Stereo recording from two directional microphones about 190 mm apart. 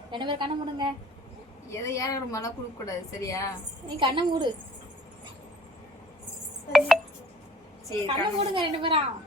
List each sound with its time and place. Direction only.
0.1 s a woman's voice: 25° right (ahead or behind)
1.7 s a woman's voice: 15° left (ahead or behind)
3.8 s a woman's voice: 25° right (ahead or behind)
6.7 s a sound: centre (ahead or behind)
8.0 s a woman's voice: 30° right (ahead or behind)